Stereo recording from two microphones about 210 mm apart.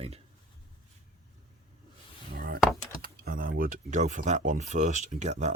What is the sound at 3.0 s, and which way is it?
Speech, 45° right (ahead or behind).